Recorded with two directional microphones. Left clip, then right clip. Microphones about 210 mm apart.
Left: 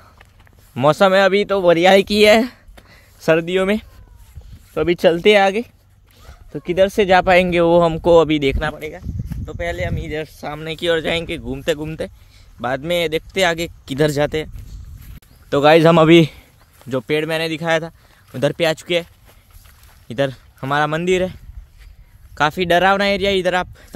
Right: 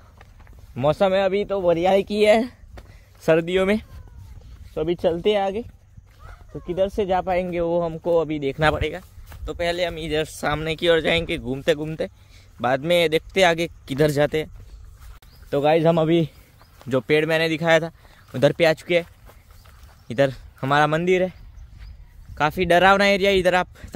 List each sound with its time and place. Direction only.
0.7 s speech: 25° left (ahead or behind); by 3.8 s 10° left (ahead or behind)
4.7 s speech: 30° left (ahead or behind)
9.3 s speech: centre (ahead or behind)
10.4 s speech: 40° right (ahead or behind)
10.8 s speech: centre (ahead or behind)
15.5 s speech: 35° left (ahead or behind)
16.7 s speech: centre (ahead or behind)
20.1 s speech: 5° left (ahead or behind)
21.0 s speech: 15° left (ahead or behind)